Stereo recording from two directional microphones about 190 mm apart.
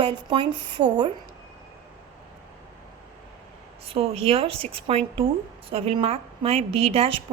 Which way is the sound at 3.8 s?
30° right (ahead or behind).